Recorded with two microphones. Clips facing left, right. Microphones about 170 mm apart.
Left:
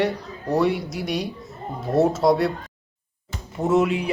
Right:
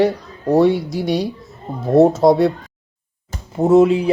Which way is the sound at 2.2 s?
20° right (ahead or behind).